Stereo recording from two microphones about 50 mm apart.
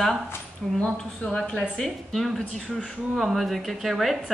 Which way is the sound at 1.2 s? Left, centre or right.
Centre.